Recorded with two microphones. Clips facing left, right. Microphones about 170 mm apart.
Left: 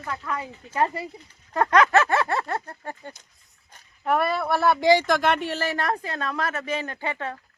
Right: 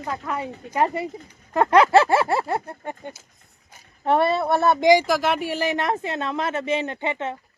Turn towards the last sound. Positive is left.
turn(degrees=-20)  # may be behind; listen again after turning